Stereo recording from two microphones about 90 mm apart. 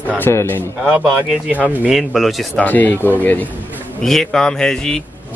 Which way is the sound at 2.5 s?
20° left (ahead or behind).